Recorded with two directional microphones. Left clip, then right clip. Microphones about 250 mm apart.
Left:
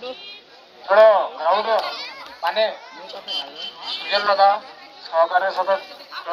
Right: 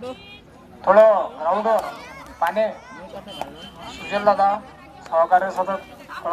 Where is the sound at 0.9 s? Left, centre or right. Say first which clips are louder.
Even; centre.